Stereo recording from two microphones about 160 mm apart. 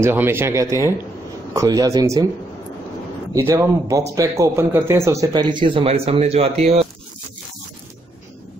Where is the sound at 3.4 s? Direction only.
20° right (ahead or behind); by 6.8 s 40° right (ahead or behind).